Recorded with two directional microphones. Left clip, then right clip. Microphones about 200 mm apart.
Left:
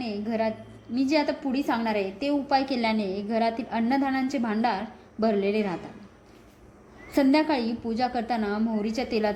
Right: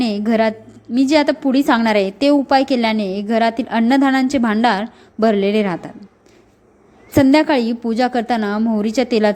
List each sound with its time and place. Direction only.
0.0 s a woman's voice: 35° right (ahead or behind)
7.1 s a woman's voice: 30° right (ahead or behind)